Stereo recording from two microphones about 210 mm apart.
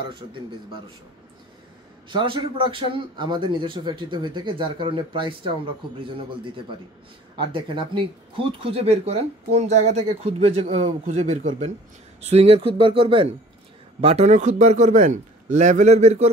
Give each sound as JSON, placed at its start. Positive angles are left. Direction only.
{"t": 2.0, "sound": "a man's voice", "side_deg": -25}